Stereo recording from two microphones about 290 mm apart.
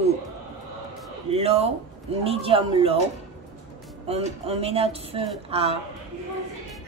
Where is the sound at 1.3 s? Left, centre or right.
Right.